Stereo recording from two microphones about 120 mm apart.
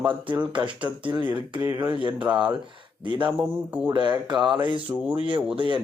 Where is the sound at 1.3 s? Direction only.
15° right (ahead or behind).